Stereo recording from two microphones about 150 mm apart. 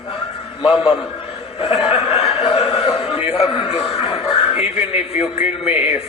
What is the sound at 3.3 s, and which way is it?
A man's voice, 40° left (ahead or behind).